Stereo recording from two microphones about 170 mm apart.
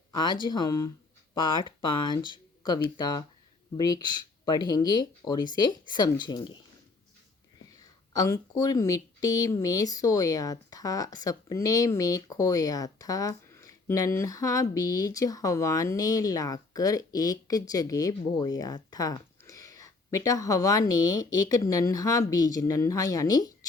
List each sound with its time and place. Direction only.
0.1 s speech: 25° left (ahead or behind)
7.8 s speech: 20° left (ahead or behind)